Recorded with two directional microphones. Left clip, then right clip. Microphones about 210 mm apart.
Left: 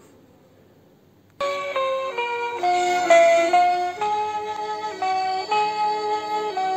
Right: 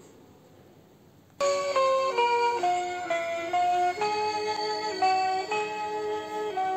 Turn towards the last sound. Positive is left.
turn(degrees=30)  # may be behind; listen again after turning